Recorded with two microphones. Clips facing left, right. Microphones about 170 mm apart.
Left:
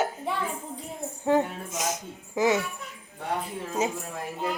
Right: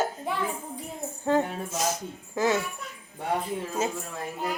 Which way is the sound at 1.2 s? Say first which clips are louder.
Left 1 dB; 15° left (ahead or behind).